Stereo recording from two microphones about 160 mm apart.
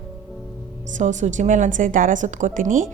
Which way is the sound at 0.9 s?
50° right (ahead or behind).